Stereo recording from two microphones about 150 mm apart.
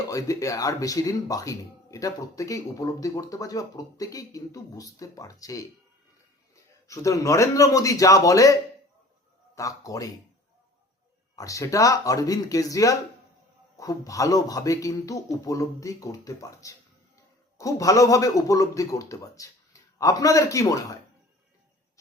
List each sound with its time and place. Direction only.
0.1 s speech: 20° left (ahead or behind)
6.8 s speech: 20° left (ahead or behind)
9.6 s speech: 20° left (ahead or behind)
11.3 s speech: 20° left (ahead or behind)